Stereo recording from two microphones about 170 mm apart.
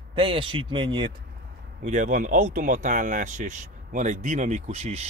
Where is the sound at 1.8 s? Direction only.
45° right (ahead or behind).